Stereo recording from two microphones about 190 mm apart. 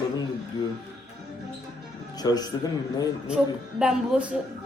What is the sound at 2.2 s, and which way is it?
Speech, 20° left (ahead or behind).